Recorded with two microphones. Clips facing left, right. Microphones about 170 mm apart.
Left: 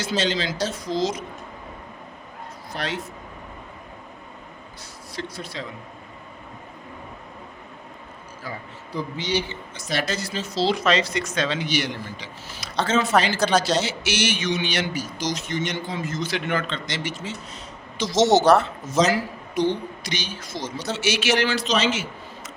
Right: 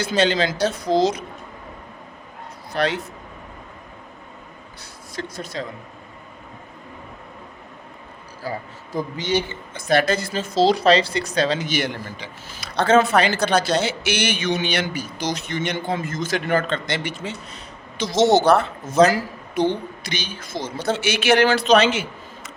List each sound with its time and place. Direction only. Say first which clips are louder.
0.0 s speech: right 5 dB; 60° right (ahead or behind)
2.7 s speech: right 7 dB; 65° right (ahead or behind)
5.1 s speech: right 3 dB; 45° right (ahead or behind)
8.4 s speech: right 6 dB; 40° right (ahead or behind)
10.8 s speech: right 5 dB; 35° right (ahead or behind); by 22.0 s 60° right (ahead or behind)